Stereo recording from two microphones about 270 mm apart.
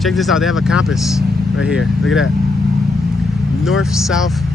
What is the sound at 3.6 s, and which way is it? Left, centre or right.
Speech, centre.